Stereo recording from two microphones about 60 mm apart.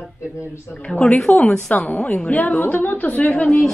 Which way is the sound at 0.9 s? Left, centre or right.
Left.